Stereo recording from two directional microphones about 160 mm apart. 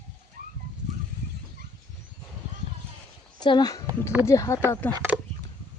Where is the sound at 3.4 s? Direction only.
25° left (ahead or behind).